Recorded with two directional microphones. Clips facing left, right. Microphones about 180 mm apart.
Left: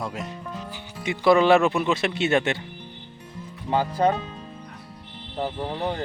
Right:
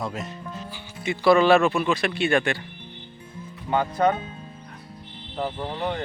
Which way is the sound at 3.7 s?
30° left (ahead or behind).